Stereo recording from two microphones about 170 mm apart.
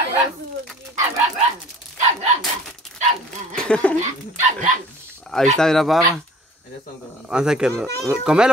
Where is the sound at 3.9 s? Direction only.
45° right (ahead or behind).